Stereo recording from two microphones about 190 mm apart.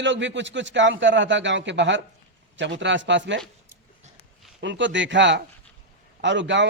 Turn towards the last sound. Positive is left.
turn(degrees=-70)  # may be behind; listen again after turning